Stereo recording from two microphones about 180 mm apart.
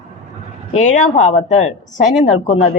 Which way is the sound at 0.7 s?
45° left (ahead or behind).